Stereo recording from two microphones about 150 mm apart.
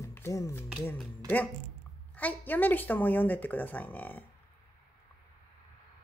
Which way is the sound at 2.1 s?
10° left (ahead or behind).